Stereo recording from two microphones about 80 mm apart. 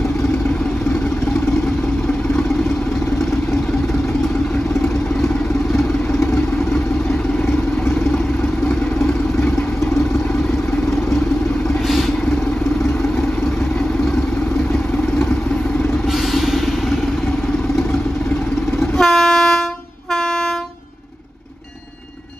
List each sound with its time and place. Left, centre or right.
6.1 s vehicle: left
8.6 s vehicle: left
18.9 s train: centre